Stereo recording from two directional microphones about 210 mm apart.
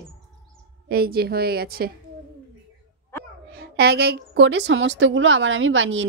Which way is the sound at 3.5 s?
50° right (ahead or behind).